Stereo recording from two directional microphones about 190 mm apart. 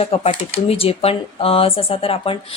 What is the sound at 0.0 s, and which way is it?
Speech, 30° left (ahead or behind).